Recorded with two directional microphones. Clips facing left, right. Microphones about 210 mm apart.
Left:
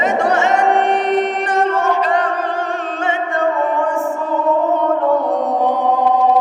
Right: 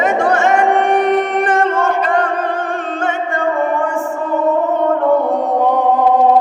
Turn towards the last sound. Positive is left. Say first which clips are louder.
# right 3 dB
turn(degrees=-50)  # may be behind; listen again after turning